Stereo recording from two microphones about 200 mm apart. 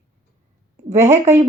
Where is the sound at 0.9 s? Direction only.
15° right (ahead or behind).